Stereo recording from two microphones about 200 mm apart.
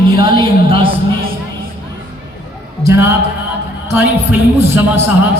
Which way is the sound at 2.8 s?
15° right (ahead or behind).